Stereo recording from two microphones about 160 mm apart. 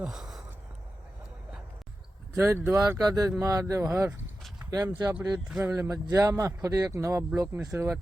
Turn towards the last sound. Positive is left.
turn(degrees=-15)  # may be behind; listen again after turning